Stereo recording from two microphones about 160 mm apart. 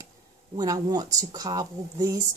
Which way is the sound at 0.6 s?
25° right (ahead or behind).